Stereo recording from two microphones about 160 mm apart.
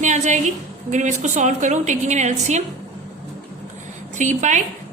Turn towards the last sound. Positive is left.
turn(degrees=-50)  # may be behind; listen again after turning